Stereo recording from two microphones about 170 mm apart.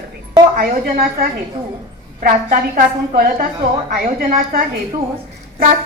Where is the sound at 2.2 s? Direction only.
60° right (ahead or behind).